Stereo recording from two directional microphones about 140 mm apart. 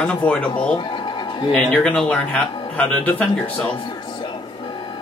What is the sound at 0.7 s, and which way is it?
Television, 35° left (ahead or behind).